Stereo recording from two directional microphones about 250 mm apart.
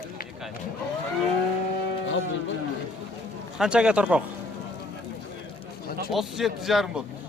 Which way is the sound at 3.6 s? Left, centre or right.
Centre.